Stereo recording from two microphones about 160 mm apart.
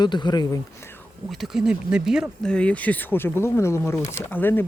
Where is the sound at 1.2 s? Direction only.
Centre (ahead or behind).